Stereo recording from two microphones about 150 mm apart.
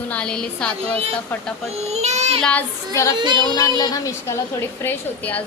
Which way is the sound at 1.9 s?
50° right (ahead or behind).